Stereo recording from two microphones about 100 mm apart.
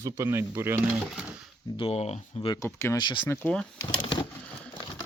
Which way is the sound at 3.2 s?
20° left (ahead or behind).